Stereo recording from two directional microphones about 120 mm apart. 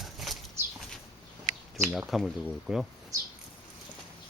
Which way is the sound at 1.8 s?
Centre (ahead or behind).